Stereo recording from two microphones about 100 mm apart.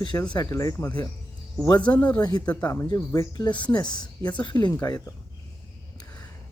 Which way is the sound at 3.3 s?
50° left (ahead or behind).